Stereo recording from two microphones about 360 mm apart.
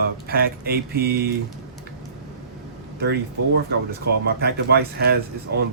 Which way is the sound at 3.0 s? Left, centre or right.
Right.